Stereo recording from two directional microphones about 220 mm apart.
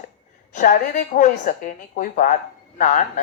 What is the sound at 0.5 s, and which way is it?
A woman's voice, 35° left (ahead or behind).